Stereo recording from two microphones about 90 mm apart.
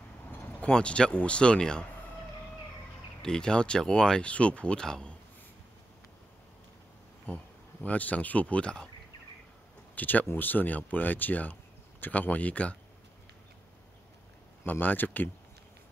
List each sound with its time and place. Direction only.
0.3 s speech: 20° left (ahead or behind)
3.2 s speech: 10° left (ahead or behind)
7.8 s speech: 15° left (ahead or behind)
9.9 s speech: 20° left (ahead or behind)
14.7 s speech: 20° left (ahead or behind)